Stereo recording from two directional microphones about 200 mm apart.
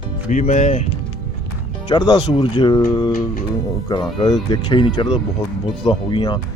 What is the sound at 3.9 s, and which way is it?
Speech, 20° left (ahead or behind).